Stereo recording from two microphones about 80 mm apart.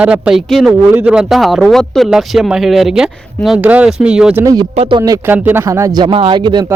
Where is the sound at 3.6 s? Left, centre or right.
Centre.